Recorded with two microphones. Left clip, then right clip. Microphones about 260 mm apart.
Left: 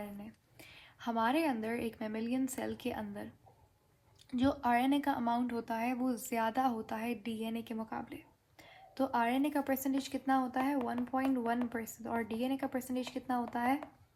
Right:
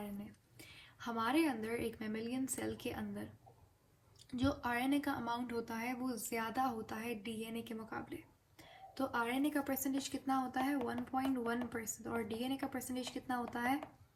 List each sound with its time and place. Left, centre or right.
0.9 s speech: left
4.3 s speech: left